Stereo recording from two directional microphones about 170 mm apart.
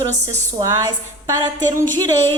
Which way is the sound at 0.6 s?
20° right (ahead or behind).